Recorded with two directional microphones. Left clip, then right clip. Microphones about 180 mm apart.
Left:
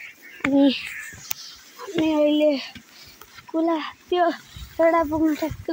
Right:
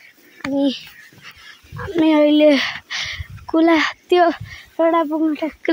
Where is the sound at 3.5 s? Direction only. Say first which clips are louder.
Right 9 dB; 75° right (ahead or behind).